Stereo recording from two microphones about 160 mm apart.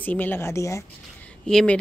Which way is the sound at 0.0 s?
10° left (ahead or behind).